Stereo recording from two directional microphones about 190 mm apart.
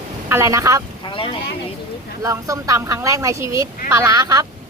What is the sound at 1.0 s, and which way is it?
Speech, 25° left (ahead or behind).